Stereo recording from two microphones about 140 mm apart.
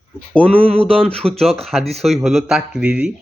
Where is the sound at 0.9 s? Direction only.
5° left (ahead or behind).